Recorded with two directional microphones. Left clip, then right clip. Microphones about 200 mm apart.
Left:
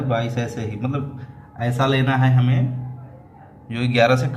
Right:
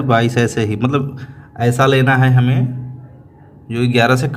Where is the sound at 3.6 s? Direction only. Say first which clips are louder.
Right 3 dB; 40° right (ahead or behind).